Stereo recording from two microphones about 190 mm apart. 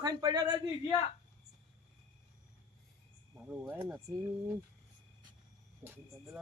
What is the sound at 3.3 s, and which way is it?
Speech, 10° right (ahead or behind).